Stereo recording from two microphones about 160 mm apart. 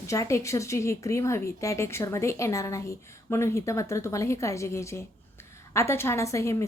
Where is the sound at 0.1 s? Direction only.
20° left (ahead or behind).